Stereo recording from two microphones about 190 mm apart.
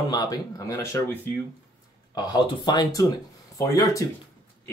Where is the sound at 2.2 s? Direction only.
20° left (ahead or behind).